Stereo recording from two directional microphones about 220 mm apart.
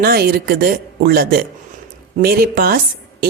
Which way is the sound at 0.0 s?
45° right (ahead or behind).